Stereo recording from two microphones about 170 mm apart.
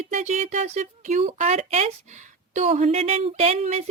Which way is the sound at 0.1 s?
45° right (ahead or behind).